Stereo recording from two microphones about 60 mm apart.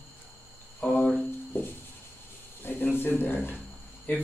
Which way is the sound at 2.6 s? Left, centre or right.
Left.